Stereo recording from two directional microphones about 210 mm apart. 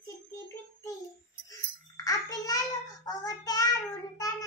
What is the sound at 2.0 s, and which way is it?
Child singing, 15° left (ahead or behind).